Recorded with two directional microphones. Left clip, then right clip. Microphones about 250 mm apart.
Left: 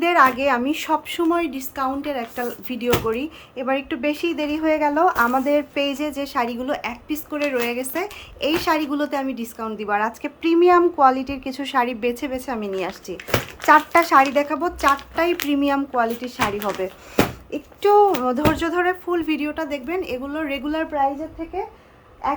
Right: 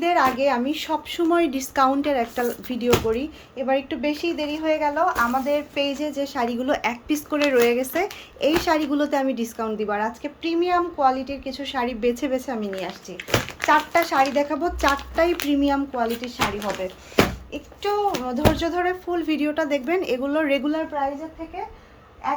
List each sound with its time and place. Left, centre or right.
0.0 s a woman's voice: centre
17.5 s speech: left
18.1 s speech: centre